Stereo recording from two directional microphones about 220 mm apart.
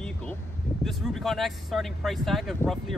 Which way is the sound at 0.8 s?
Centre (ahead or behind).